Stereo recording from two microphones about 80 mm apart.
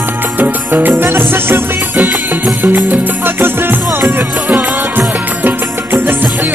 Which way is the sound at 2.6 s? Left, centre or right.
Right.